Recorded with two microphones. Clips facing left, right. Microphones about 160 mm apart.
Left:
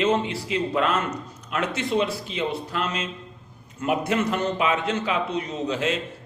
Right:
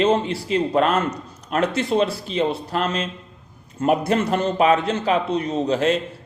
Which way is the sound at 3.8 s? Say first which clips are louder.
Right 4 dB; 40° right (ahead or behind).